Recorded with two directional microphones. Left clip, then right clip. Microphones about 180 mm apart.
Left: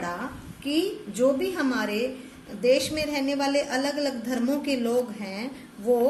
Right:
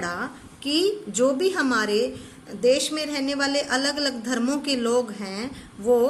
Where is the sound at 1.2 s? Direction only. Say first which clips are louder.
Right 1 dB; 45° right (ahead or behind).